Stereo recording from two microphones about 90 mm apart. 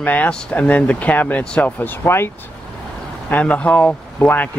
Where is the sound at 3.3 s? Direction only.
15° left (ahead or behind).